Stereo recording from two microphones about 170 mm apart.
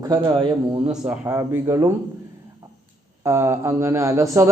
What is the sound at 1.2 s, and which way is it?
Speech, 15° right (ahead or behind).